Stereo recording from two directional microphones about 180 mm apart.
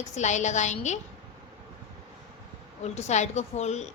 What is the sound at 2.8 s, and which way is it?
A woman's voice, 40° left (ahead or behind).